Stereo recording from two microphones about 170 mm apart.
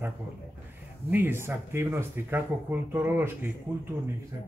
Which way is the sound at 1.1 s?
15° right (ahead or behind).